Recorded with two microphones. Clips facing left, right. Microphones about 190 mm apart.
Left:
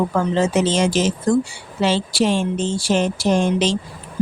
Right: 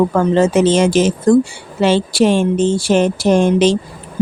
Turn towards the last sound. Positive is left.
turn(degrees=-55)  # may be behind; listen again after turning